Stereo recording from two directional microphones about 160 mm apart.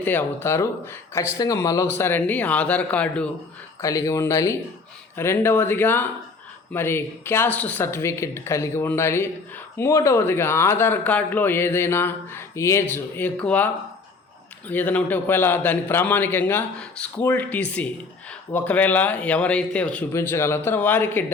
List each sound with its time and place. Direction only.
0.0 s speech: 10° left (ahead or behind)
3.8 s speech: 20° left (ahead or behind)
14.7 s speech: 10° left (ahead or behind)